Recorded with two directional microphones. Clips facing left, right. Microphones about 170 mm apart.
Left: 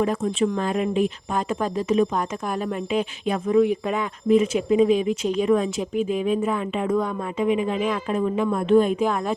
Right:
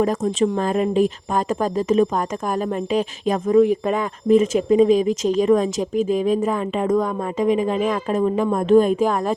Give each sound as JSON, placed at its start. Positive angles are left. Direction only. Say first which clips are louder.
{"t": 0.0, "sound": "speech", "louder": "right 3 dB", "side_deg": -40}